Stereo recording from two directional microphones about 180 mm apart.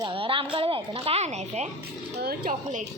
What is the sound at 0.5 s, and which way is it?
A woman's voice, 30° right (ahead or behind).